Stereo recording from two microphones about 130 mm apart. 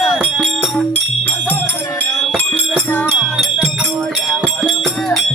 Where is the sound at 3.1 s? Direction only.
5° right (ahead or behind).